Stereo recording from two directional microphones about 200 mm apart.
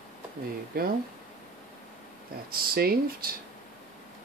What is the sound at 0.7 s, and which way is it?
Speech, 50° right (ahead or behind).